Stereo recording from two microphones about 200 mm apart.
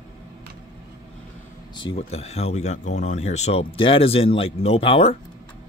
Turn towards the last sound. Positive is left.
turn(degrees=30)  # may be behind; listen again after turning